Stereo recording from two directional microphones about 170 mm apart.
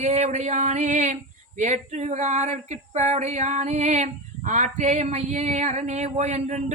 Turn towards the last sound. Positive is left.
turn(degrees=-45)  # may be behind; listen again after turning